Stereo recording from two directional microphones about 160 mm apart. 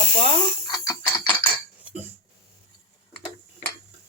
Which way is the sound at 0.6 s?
25° left (ahead or behind).